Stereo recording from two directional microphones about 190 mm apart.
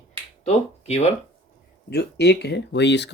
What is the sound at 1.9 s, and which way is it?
Speech, 60° left (ahead or behind).